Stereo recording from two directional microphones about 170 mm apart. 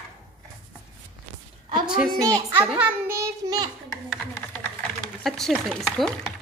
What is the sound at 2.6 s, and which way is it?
A child's voice, 5° right (ahead or behind).